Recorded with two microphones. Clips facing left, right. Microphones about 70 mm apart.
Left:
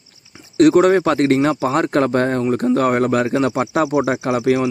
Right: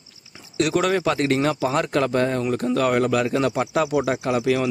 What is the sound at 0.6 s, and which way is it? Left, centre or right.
Speech, left.